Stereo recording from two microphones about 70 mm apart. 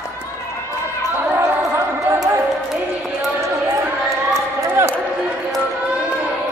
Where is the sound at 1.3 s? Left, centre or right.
Right.